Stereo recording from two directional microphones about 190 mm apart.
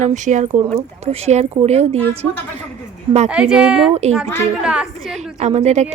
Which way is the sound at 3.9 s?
35° right (ahead or behind).